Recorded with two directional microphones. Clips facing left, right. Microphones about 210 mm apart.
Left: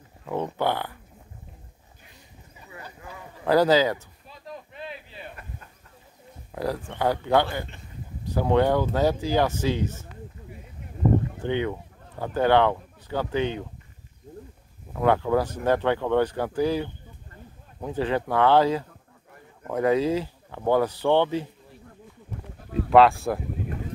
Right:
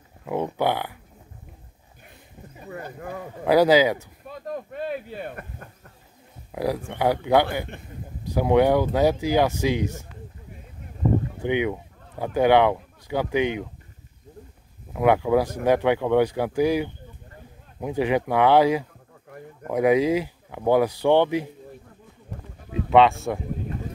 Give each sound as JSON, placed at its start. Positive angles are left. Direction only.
{"t": 0.3, "sound": "speech", "side_deg": -10}
{"t": 2.6, "sound": "speech", "side_deg": -50}
{"t": 3.4, "sound": "speech", "side_deg": -10}
{"t": 4.3, "sound": "a sound", "side_deg": -50}
{"t": 6.5, "sound": "speech", "side_deg": -10}
{"t": 11.4, "sound": "speech", "side_deg": -15}
{"t": 15.0, "sound": "speech", "side_deg": -10}
{"t": 22.7, "sound": "speech", "side_deg": 0}